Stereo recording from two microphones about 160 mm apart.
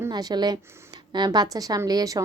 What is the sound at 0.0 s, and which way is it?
A woman's voice, 25° right (ahead or behind).